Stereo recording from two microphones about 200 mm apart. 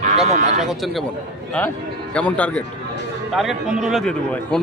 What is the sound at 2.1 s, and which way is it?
A man's voice, 5° left (ahead or behind).